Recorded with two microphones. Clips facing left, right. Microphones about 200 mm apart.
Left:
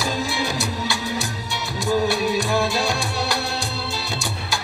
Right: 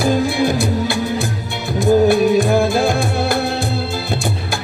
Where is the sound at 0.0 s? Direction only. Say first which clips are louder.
Right 9 dB; 55° right (ahead or behind).